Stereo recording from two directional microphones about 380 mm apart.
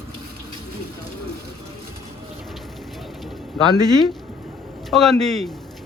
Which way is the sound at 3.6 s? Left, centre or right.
Centre.